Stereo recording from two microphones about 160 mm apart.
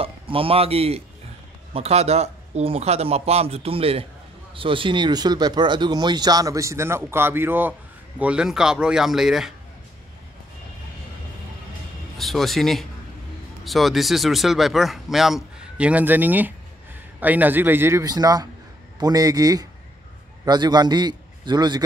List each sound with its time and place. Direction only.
0.0 s a man's voice: 35° right (ahead or behind); by 9.5 s 5° right (ahead or behind)
12.2 s a man's voice: centre (ahead or behind); by 21.8 s 25° right (ahead or behind)